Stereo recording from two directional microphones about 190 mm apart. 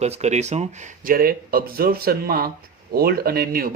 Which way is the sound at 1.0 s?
50° right (ahead or behind).